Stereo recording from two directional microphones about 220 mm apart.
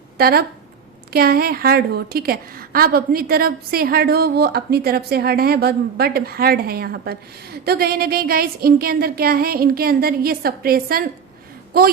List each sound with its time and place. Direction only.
0.2 s a woman's voice: 45° right (ahead or behind)